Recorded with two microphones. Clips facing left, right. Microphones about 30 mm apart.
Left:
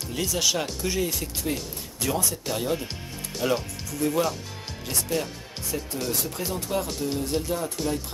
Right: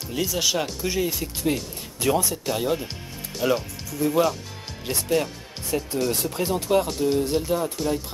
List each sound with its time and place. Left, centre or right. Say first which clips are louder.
0.1 s speech: right 2 dB; centre
1.4 s speech: right 7 dB; centre
2.4 s speech: right 3 dB; centre
6.2 s speech: right 6 dB; centre
6.9 s speech: right 5 dB; centre